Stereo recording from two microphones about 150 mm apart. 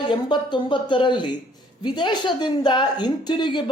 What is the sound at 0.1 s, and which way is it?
Speech, 30° left (ahead or behind).